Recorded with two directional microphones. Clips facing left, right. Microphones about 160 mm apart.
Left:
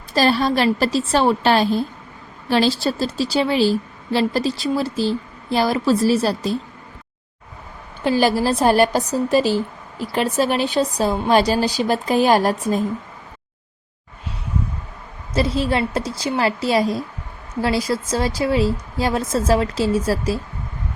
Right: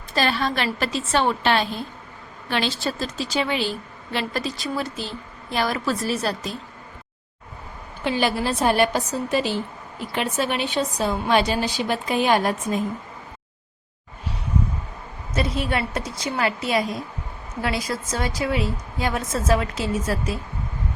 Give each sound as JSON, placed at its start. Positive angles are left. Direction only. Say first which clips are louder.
{"t": 0.1, "sound": "a woman's voice", "louder": "left 6 dB", "side_deg": 35}
{"t": 8.0, "sound": "a woman's voice", "louder": "left 5 dB", "side_deg": 40}
{"t": 15.3, "sound": "a woman's voice", "louder": "left 5 dB", "side_deg": 30}